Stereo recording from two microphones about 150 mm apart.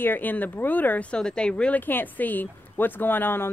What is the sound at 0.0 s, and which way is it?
Speech, 10° left (ahead or behind).